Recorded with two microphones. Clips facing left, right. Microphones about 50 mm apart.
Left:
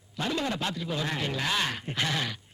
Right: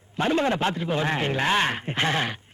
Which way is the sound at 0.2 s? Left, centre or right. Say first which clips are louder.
Right 7 dB; right.